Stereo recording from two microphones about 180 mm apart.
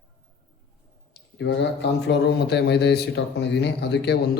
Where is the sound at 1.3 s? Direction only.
85° left.